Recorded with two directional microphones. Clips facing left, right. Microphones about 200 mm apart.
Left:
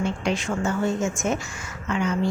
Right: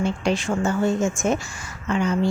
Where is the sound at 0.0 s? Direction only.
35° right (ahead or behind).